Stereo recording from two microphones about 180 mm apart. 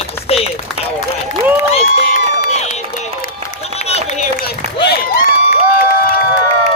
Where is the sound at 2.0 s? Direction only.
50° left (ahead or behind).